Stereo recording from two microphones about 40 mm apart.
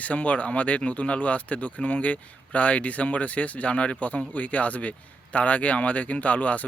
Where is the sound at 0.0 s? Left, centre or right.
Left.